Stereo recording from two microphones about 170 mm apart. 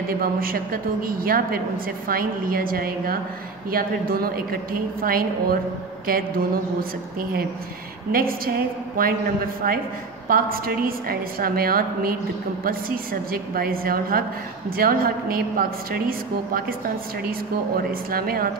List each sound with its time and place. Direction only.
0.1 s a woman's voice: 60° right (ahead or behind)
18.1 s a woman's voice: 60° right (ahead or behind)